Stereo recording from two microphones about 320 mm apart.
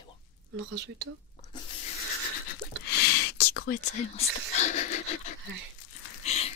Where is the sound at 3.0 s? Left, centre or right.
Left.